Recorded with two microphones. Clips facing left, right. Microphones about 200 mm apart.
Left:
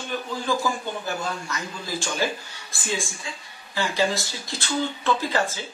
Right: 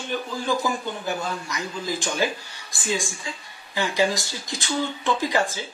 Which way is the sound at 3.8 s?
15° right (ahead or behind).